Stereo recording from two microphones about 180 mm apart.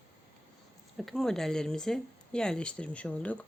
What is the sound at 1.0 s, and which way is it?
Speech, centre (ahead or behind).